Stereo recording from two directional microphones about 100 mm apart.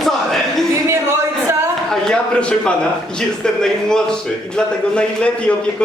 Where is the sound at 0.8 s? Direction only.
25° right (ahead or behind).